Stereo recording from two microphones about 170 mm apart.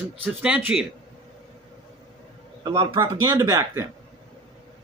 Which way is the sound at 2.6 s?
25° right (ahead or behind).